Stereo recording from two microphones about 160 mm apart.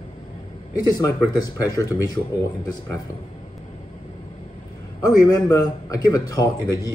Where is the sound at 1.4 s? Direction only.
20° left (ahead or behind).